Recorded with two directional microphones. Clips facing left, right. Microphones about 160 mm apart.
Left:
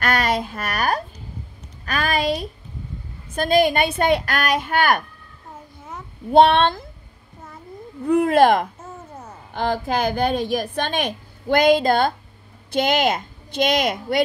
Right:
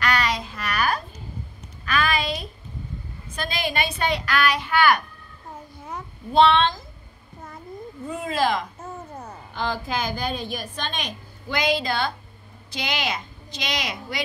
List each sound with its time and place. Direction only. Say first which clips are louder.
0.0 s a sound: left 3 dB; 50° left (ahead or behind)
3.3 s a woman's voice: left 10 dB; 50° left (ahead or behind)
6.3 s a woman's voice: left 4 dB; 50° left (ahead or behind)
8.0 s a woman's voice: left 10 dB; 65° left (ahead or behind)